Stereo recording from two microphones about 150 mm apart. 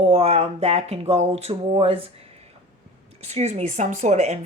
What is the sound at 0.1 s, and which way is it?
Speech, 40° right (ahead or behind).